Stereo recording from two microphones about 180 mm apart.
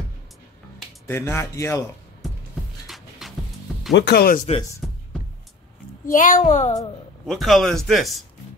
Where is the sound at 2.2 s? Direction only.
Centre (ahead or behind).